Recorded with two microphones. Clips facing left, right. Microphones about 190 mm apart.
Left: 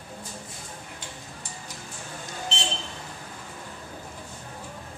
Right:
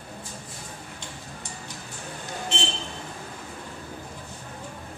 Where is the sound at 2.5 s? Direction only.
55° right (ahead or behind).